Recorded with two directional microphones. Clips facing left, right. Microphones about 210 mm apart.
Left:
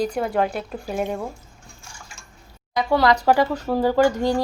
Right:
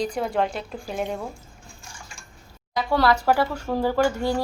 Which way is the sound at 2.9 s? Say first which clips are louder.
Left 2 dB; 10° left (ahead or behind).